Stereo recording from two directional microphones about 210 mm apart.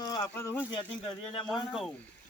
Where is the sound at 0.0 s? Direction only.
20° left (ahead or behind).